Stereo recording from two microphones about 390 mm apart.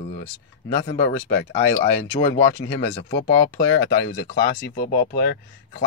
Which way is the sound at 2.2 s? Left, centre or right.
Left.